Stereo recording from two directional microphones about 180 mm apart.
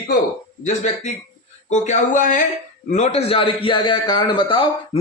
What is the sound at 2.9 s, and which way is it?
A man's voice, 35° left (ahead or behind).